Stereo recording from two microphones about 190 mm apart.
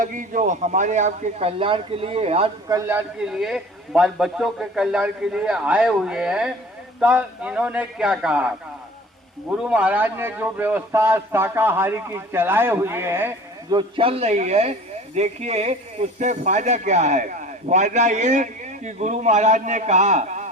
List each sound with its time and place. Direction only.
0.0 s speech: 45° right (ahead or behind)
2.6 s a man's voice: 15° right (ahead or behind)
13.7 s speech: 25° right (ahead or behind)